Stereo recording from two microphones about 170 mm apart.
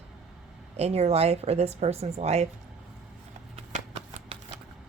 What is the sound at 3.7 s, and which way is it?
Shuffling cards, 40° right (ahead or behind).